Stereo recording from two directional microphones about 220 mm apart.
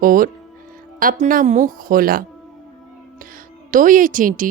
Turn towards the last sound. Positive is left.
turn(degrees=-40)  # may be behind; listen again after turning